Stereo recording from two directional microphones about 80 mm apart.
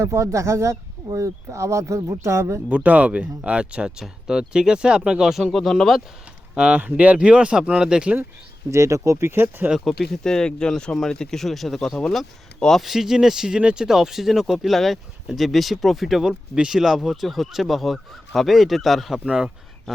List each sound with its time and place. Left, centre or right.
0.0 s speech: right
2.6 s speech: centre
6.5 s speech: centre
8.7 s speech: right
9.8 s speech: centre